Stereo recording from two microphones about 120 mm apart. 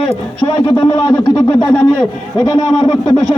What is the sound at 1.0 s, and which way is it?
A man's voice, 35° left (ahead or behind).